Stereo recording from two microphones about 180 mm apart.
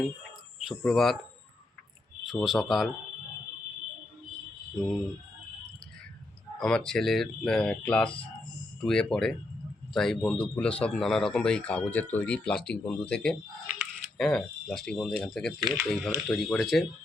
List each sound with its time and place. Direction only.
0.6 s speech: centre (ahead or behind)
2.4 s speech: centre (ahead or behind)
4.7 s speech: centre (ahead or behind)
6.6 s speech: 5° left (ahead or behind)